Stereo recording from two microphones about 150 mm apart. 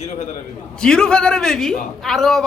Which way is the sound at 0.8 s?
5° left (ahead or behind).